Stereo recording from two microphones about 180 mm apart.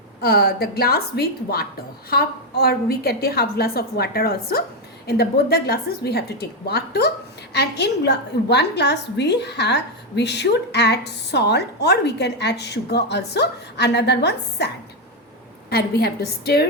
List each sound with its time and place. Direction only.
0.2 s a woman's voice: 55° left (ahead or behind)
15.7 s a woman's voice: 60° left (ahead or behind)